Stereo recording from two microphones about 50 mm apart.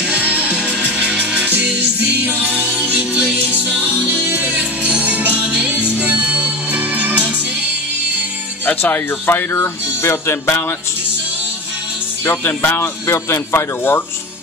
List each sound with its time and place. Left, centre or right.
0.0 s music: right
4.1 s music: right
8.6 s speech: left
9.5 s a man's voice: left
12.3 s a man's voice: left